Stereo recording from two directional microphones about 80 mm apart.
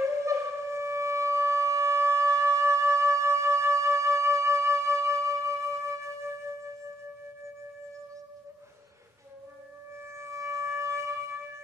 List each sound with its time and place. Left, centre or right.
0.2 s wind instrument: right
10.1 s wind instrument: right